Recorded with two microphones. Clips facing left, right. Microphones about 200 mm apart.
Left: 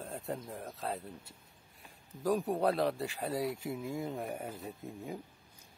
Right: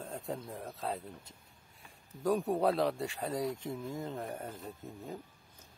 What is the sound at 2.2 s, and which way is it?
Speech, centre (ahead or behind).